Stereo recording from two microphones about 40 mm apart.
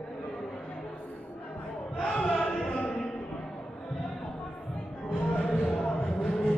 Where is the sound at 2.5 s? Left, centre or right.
Centre.